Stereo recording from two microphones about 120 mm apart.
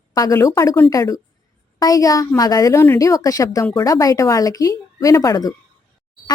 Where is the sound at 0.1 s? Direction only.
25° left (ahead or behind).